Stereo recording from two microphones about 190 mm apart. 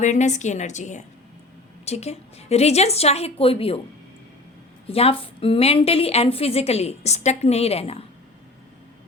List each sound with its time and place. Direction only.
0.0 s a woman's voice: 40° left (ahead or behind)
4.9 s a woman's voice: 30° left (ahead or behind)